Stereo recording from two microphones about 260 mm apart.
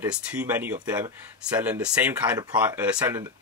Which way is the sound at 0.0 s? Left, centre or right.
Centre.